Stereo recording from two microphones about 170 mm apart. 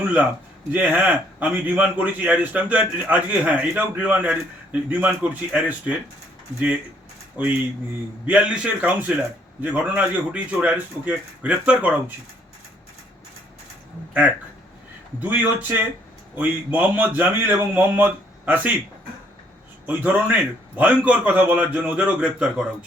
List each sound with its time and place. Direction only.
0.7 s a man's voice: 10° right (ahead or behind)
7.4 s a man's voice: 10° right (ahead or behind)
14.1 s a man's voice: 5° right (ahead or behind)
19.8 s a man's voice: 10° right (ahead or behind)